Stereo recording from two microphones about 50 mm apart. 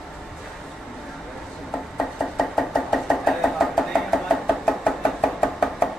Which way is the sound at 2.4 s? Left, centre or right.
Centre.